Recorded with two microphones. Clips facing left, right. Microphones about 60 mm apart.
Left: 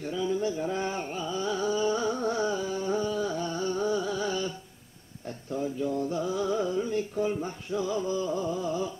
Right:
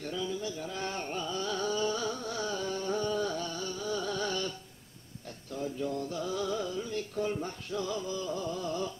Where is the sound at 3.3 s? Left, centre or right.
Left.